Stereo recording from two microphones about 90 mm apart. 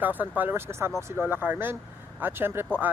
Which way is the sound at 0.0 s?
20° right (ahead or behind).